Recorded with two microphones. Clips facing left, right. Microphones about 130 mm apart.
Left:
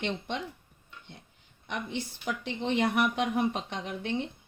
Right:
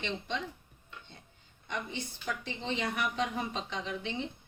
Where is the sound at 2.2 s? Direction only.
70° left (ahead or behind).